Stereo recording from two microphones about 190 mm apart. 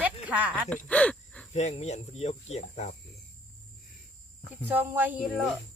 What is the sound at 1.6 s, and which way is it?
Cricket, 35° left (ahead or behind).